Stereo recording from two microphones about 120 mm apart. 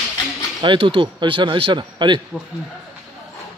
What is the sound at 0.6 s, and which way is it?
Speech, 45° right (ahead or behind).